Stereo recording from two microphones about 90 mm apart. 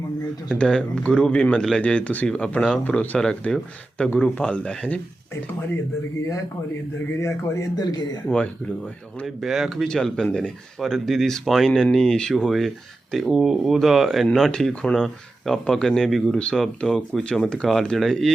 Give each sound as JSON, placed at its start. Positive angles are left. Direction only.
{"t": 0.6, "sound": "speech", "side_deg": 10}
{"t": 7.2, "sound": "speech", "side_deg": 30}
{"t": 7.8, "sound": "a man's voice", "side_deg": 50}
{"t": 9.2, "sound": "speech", "side_deg": 0}